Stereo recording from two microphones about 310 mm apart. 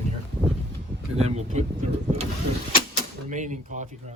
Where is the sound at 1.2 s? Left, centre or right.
Right.